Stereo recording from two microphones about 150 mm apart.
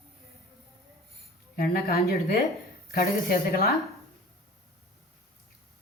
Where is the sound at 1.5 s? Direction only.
90° left.